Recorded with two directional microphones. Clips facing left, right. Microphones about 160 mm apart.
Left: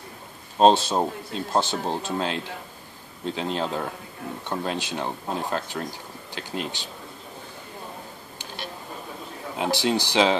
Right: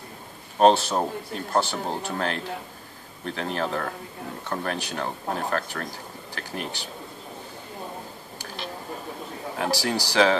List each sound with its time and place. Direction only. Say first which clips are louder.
0.6 s speech: left 1 dB; 20° left (ahead or behind)
9.6 s speech: left 2 dB; 20° left (ahead or behind)